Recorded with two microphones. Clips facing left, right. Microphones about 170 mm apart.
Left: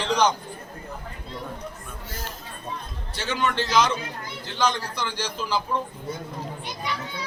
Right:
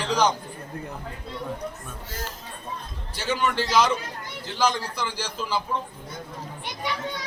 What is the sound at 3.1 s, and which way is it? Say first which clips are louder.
A man's voice: right 1 dB; 10° right (ahead or behind).